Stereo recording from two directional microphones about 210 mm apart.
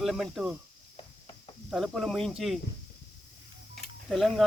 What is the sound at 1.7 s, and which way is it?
Speech, centre (ahead or behind).